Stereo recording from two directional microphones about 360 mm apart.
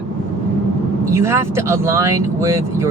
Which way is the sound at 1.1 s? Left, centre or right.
Centre.